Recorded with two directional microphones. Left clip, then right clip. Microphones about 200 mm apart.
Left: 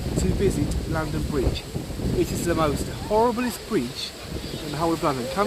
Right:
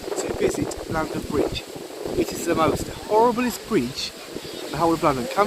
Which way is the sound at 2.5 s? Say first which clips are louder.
Right 5 dB; 15° right (ahead or behind).